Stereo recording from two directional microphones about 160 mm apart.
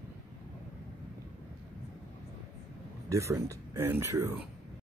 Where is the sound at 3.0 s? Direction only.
20° right (ahead or behind).